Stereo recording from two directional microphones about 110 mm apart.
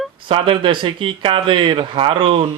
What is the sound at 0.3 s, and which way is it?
A man's voice, 50° right (ahead or behind).